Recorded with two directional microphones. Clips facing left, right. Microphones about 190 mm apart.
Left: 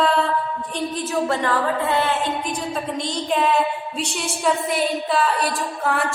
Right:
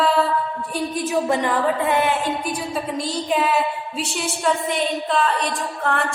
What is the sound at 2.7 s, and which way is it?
A woman's voice, 5° right (ahead or behind).